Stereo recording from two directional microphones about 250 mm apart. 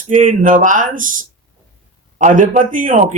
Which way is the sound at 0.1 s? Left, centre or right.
Right.